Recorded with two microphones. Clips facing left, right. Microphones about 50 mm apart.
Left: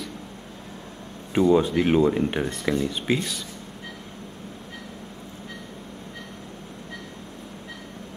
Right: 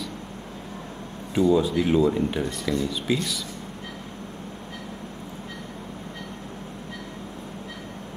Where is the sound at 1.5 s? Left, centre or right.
Left.